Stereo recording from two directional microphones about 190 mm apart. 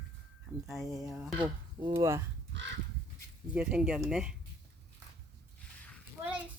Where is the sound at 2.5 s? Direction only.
70° right (ahead or behind).